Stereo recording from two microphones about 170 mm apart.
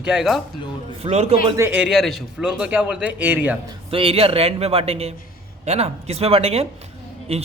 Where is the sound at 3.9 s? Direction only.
35° right (ahead or behind).